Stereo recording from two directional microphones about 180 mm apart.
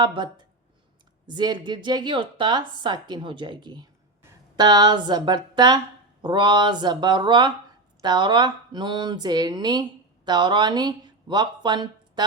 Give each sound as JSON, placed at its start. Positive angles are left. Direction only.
{"t": 0.0, "sound": "speech", "side_deg": -25}
{"t": 1.3, "sound": "speech", "side_deg": -25}